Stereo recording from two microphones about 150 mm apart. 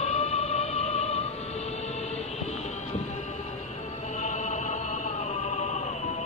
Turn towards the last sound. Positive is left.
turn(degrees=50)  # may be behind; listen again after turning